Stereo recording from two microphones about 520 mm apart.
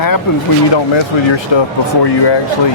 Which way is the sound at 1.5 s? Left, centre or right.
Left.